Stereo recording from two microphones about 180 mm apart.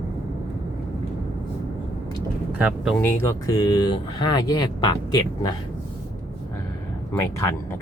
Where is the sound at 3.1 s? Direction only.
15° left (ahead or behind).